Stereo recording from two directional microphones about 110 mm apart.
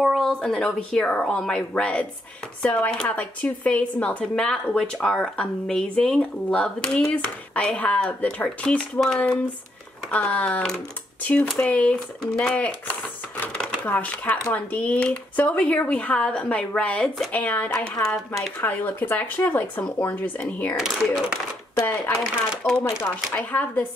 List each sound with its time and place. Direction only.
0.0 s speech: centre (ahead or behind); by 18.0 s 20° left (ahead or behind)
18.0 s speech: 5° left (ahead or behind)
20.7 s speech: 5° right (ahead or behind)
23.3 s speech: 15° left (ahead or behind)